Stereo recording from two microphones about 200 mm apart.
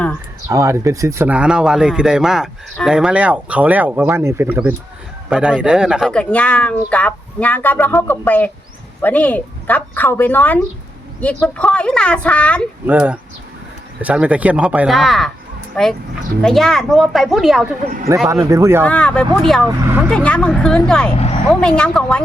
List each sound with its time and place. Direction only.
0.4 s speech: 15° right (ahead or behind); by 12.6 s 5° left (ahead or behind)
12.9 s speech: 10° right (ahead or behind)
17.8 s a man's voice: 40° right (ahead or behind)
18.3 s speech: 15° right (ahead or behind)
18.9 s speech: 5° left (ahead or behind)
19.6 s speech: 10° right (ahead or behind)
20.1 s speech: 5° left (ahead or behind)